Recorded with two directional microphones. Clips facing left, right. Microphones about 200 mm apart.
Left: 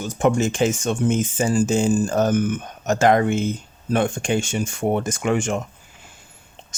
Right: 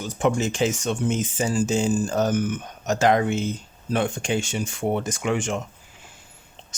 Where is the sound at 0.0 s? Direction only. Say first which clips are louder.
Left 3 dB; 50° left (ahead or behind).